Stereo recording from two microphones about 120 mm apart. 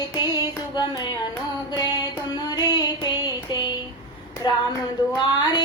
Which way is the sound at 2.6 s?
35° left (ahead or behind).